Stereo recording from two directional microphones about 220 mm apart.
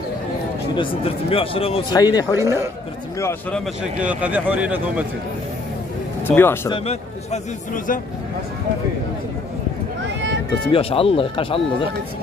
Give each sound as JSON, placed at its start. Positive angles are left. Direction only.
{"t": 0.7, "sound": "speech", "side_deg": 25}
{"t": 2.3, "sound": "speech", "side_deg": -10}
{"t": 3.2, "sound": "speech", "side_deg": 10}
{"t": 4.0, "sound": "speech", "side_deg": -5}
{"t": 6.2, "sound": "speech", "side_deg": 10}
{"t": 6.7, "sound": "a man's voice", "side_deg": 30}
{"t": 10.7, "sound": "speech", "side_deg": 25}